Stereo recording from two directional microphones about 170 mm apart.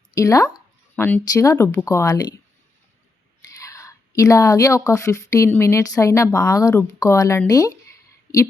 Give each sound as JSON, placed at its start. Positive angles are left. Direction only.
{"t": 0.1, "sound": "a woman's voice", "side_deg": 20}
{"t": 3.6, "sound": "a woman's voice", "side_deg": 20}